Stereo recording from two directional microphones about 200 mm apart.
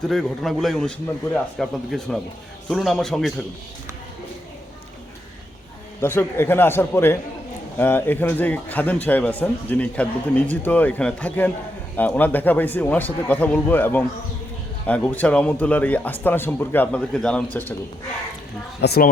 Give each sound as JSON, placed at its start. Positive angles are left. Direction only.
{"t": 0.0, "sound": "a man's voice", "side_deg": 0}
{"t": 6.0, "sound": "a man's voice", "side_deg": 10}
{"t": 18.8, "sound": "a woman's voice", "side_deg": 50}